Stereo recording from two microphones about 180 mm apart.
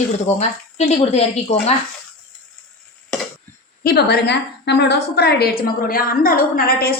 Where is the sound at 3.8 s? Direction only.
65° left (ahead or behind).